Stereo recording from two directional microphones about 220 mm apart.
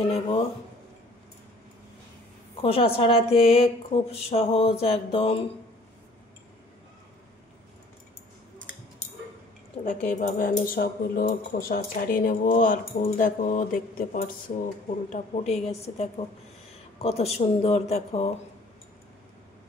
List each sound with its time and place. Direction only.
0.0 s speech: 25° left (ahead or behind)
2.6 s speech: 25° left (ahead or behind)
9.8 s speech: 35° left (ahead or behind)